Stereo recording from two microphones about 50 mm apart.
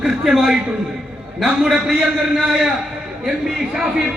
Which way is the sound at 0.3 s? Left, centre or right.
Centre.